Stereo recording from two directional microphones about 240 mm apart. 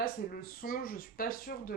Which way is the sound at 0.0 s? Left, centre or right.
Left.